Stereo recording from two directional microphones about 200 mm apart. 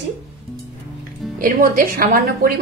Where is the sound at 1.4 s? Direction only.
45° right (ahead or behind).